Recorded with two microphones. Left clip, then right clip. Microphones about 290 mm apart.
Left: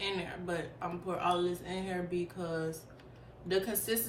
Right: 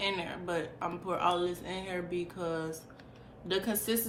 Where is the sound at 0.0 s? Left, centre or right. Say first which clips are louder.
Right 3 dB; centre.